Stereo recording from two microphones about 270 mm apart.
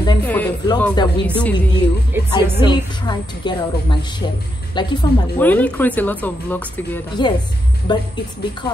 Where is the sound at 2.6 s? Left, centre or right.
Centre.